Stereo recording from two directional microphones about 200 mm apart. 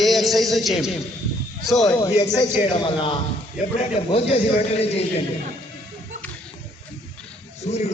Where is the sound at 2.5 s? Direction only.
30° left (ahead or behind).